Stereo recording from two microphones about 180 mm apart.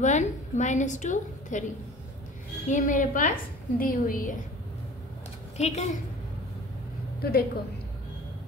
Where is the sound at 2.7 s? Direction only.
45° left (ahead or behind).